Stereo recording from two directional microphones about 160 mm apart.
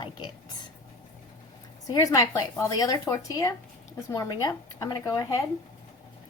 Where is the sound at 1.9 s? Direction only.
20° left (ahead or behind).